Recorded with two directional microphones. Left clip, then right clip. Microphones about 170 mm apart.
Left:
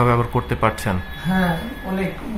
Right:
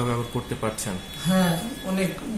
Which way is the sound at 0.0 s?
55° left (ahead or behind).